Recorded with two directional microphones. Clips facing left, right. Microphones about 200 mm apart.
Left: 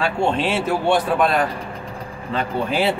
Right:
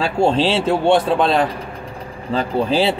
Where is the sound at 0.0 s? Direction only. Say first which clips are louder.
Right 4 dB; 30° right (ahead or behind).